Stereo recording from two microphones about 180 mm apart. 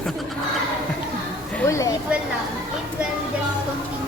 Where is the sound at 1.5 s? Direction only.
10° left (ahead or behind).